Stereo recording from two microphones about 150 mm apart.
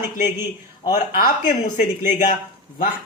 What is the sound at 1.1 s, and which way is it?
Speech, 60° left (ahead or behind).